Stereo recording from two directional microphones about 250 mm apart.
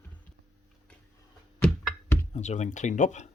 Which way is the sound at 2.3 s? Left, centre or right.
Left.